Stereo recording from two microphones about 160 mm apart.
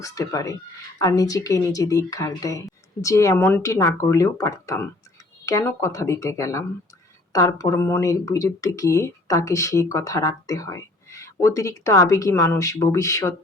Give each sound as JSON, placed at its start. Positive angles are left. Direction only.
{"t": 0.0, "sound": "speech", "side_deg": 20}